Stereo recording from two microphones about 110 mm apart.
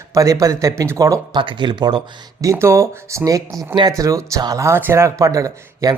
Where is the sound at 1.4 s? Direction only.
45° right (ahead or behind).